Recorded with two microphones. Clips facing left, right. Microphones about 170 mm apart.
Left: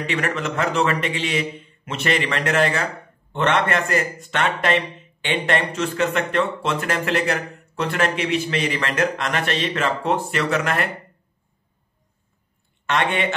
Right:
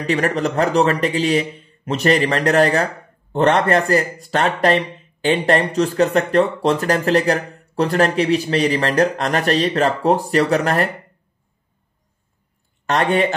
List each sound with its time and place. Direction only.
0.0 s speech: 40° right (ahead or behind)
12.8 s speech: 40° right (ahead or behind)